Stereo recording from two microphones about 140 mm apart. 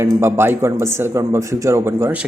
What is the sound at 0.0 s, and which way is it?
Speech, 20° right (ahead or behind).